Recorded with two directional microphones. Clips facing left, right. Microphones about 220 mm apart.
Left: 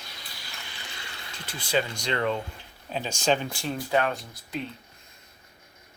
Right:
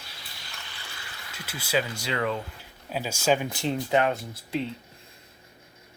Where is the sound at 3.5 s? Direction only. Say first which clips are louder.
Right 2 dB; 20° right (ahead or behind).